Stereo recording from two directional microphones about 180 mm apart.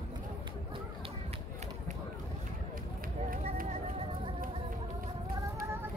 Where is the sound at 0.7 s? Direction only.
30° right (ahead or behind).